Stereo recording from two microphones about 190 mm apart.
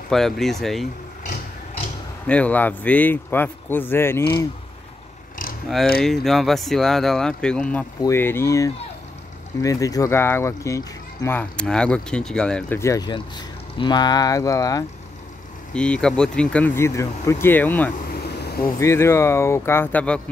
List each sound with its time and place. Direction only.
0.1 s speech: centre (ahead or behind)
2.2 s speech: 5° left (ahead or behind)
5.9 s speech: centre (ahead or behind); by 11.3 s 20° left (ahead or behind)
11.3 s speech: 5° left (ahead or behind)
15.7 s speech: 5° left (ahead or behind)
18.2 s vehicle: 60° left (ahead or behind)
18.8 s speech: 15° left (ahead or behind)